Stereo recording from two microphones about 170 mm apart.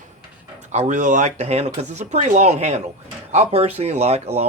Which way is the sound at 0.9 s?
45° right (ahead or behind).